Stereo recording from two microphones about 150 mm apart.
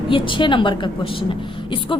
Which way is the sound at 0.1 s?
35° left (ahead or behind).